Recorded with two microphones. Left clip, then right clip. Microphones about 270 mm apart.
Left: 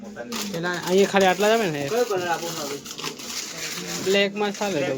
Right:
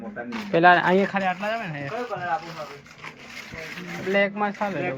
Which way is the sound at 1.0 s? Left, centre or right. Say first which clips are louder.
Left 6 dB; centre.